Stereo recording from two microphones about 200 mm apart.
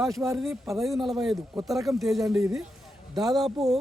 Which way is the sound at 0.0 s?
Centre (ahead or behind).